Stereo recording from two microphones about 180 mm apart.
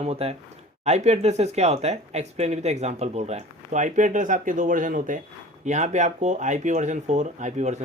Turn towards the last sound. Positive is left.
turn(degrees=-40)  # may be behind; listen again after turning